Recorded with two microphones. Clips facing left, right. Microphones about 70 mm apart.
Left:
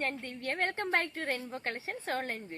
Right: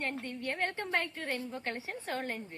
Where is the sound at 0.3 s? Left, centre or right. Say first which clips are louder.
Left 1 dB; left.